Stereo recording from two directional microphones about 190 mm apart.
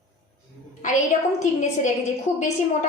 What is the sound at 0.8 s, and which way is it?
A woman's voice, 40° left (ahead or behind).